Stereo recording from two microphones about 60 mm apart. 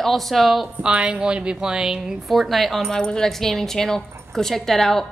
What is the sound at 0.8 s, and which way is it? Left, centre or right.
A woman's voice, centre.